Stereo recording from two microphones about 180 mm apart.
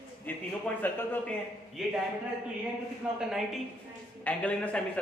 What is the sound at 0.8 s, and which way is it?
Speech, 10° left (ahead or behind).